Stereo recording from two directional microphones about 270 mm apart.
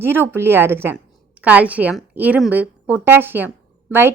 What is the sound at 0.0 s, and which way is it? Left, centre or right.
A woman's voice, centre.